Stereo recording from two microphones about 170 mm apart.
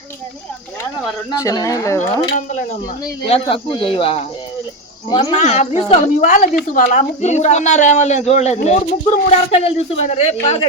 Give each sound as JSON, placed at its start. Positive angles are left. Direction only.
{"t": 1.3, "sound": "speech", "side_deg": 20}
{"t": 2.3, "sound": "a woman's voice", "side_deg": 45}
{"t": 3.2, "sound": "a man's voice", "side_deg": 35}
{"t": 5.4, "sound": "a woman's voice", "side_deg": 40}